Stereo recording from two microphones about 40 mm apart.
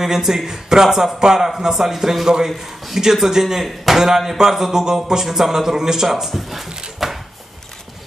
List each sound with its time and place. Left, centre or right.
0.0 s speech: centre